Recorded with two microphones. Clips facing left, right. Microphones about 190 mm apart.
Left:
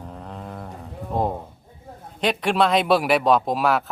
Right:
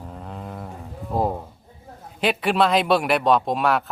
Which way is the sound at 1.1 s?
5° right (ahead or behind).